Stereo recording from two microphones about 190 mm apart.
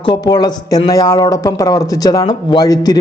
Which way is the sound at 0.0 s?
25° left (ahead or behind).